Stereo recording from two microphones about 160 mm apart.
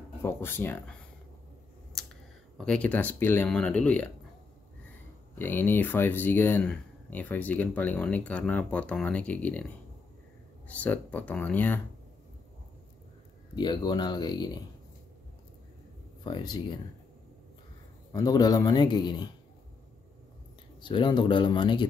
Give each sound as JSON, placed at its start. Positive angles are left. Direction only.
{"t": 0.2, "sound": "speech", "side_deg": 15}
{"t": 2.5, "sound": "speech", "side_deg": 5}
{"t": 5.4, "sound": "speech", "side_deg": 15}
{"t": 10.7, "sound": "speech", "side_deg": 10}
{"t": 13.6, "sound": "a man's voice", "side_deg": 25}
{"t": 16.3, "sound": "a man's voice", "side_deg": 30}
{"t": 18.1, "sound": "a man's voice", "side_deg": 25}
{"t": 20.8, "sound": "speech", "side_deg": 30}